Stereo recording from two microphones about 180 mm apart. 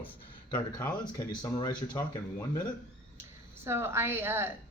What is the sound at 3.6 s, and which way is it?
Speech, 15° right (ahead or behind).